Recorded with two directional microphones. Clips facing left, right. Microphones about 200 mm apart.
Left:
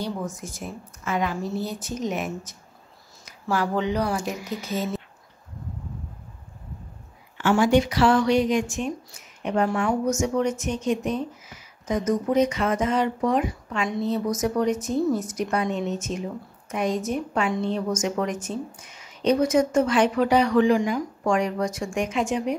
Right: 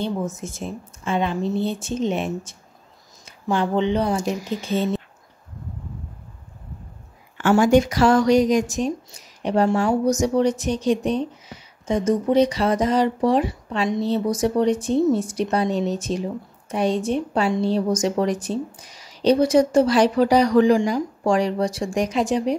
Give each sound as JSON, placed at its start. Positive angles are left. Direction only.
{"t": 0.0, "sound": "a woman's voice", "side_deg": -25}
{"t": 7.3, "sound": "a woman's voice", "side_deg": -45}